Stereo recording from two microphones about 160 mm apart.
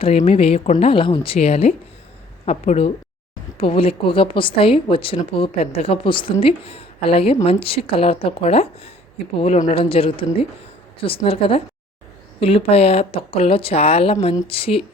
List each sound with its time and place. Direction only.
0.0 s a woman's voice: 40° left (ahead or behind)
9.7 s a woman's voice: 35° left (ahead or behind)